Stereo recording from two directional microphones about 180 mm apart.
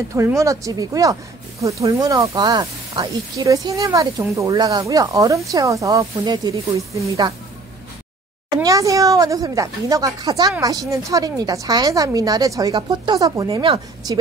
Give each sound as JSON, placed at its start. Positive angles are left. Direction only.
{"t": 0.1, "sound": "speech", "side_deg": -15}
{"t": 8.6, "sound": "speech", "side_deg": -20}